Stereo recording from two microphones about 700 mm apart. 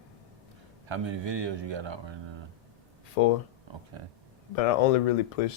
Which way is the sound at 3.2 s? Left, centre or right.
Left.